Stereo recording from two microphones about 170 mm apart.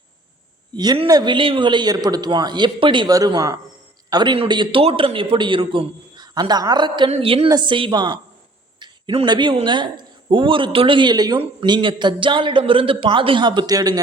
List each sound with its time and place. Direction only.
0.8 s speech: 25° right (ahead or behind)